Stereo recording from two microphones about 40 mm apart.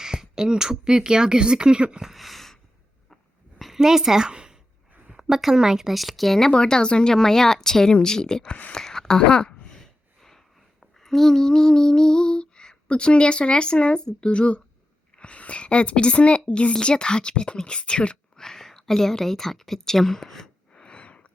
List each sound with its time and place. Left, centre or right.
0.0 s speech: centre
2.1 s a sound: centre
3.8 s a woman's voice: centre
4.3 s a sound: right
5.1 s speech: centre
6.5 s speech: left
8.4 s speech: left
8.7 s speech: centre
9.2 s speech: left
9.7 s a child's voice: centre; by 18.2 s left
18.3 s speech: centre
20.7 s a sound: left